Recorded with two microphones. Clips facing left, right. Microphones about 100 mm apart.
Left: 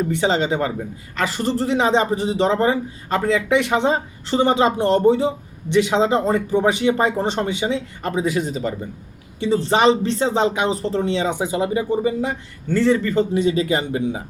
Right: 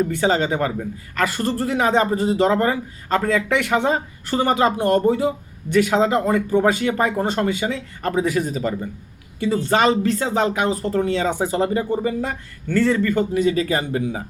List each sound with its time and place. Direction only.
0.1 s speech: 20° left (ahead or behind)